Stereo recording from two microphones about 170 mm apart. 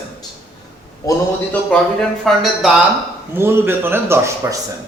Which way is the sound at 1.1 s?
5° left (ahead or behind).